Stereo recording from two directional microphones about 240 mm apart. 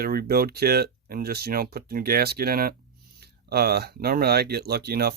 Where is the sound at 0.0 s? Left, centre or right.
Right.